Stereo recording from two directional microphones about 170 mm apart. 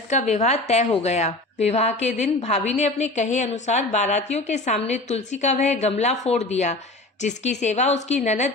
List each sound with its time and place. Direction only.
0.1 s a woman's voice: 45° left (ahead or behind)